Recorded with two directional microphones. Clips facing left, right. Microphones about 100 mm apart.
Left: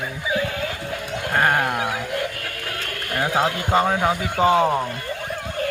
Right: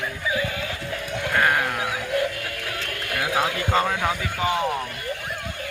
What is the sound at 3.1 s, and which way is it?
Speech, 35° left (ahead or behind).